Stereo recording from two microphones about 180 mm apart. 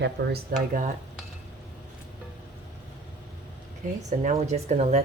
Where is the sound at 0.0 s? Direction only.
65° right (ahead or behind).